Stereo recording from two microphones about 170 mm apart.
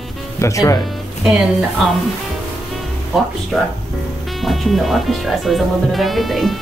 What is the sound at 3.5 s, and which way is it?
Speech, centre (ahead or behind).